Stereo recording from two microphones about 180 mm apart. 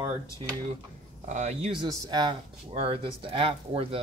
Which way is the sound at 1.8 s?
25° right (ahead or behind).